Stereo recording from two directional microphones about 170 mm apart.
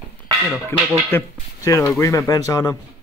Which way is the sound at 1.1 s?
20° left (ahead or behind).